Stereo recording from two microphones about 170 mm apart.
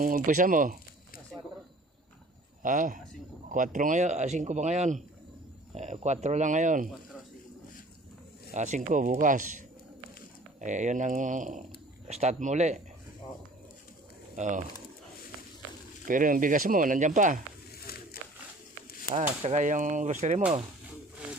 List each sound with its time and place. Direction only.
0.0 s speech: 50° right (ahead or behind)
2.6 s speech: 50° right (ahead or behind)
8.5 s speech: 45° right (ahead or behind)
14.3 s speech: 45° right (ahead or behind)
16.0 s speech: 50° right (ahead or behind)
17.7 s a sound: 65° left (ahead or behind)
19.4 s speech: 40° right (ahead or behind)